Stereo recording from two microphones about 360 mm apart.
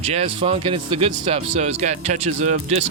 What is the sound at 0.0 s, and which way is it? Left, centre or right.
Speech, centre.